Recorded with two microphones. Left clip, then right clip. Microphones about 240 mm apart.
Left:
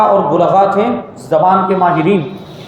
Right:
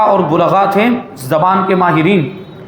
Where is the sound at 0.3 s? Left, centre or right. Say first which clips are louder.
Left 1 dB; right.